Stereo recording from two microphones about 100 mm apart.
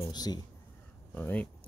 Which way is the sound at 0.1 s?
40° left (ahead or behind).